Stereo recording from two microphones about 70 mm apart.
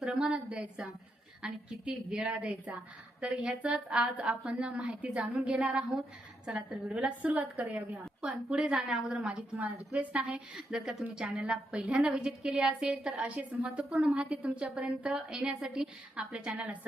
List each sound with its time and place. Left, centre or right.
0.0 s a woman's voice: centre
9.2 s a woman's voice: centre